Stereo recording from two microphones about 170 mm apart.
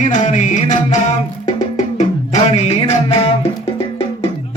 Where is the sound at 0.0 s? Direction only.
45° left (ahead or behind).